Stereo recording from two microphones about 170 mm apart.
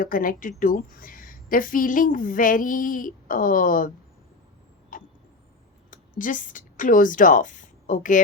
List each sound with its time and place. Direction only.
0.0 s a woman's voice: 55° left (ahead or behind)
4.9 s vehicle: 50° left (ahead or behind)
5.9 s speech: 50° left (ahead or behind)